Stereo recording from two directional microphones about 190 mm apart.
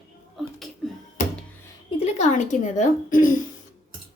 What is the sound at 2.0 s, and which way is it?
A woman's voice, 40° left (ahead or behind).